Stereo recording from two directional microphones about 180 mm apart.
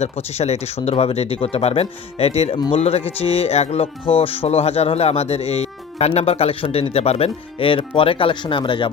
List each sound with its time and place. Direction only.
0.0 s speech: 35° left (ahead or behind)